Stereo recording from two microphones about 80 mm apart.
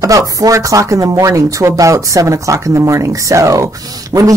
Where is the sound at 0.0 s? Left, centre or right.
Right.